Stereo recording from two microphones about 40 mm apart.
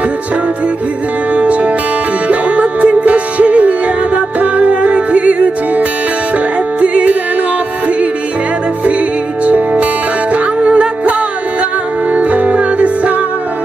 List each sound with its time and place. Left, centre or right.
1.3 s music: right
9.4 s music: right